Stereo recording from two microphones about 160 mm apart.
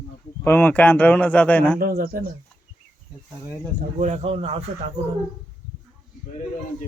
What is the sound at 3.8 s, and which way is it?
Speech, 50° right (ahead or behind).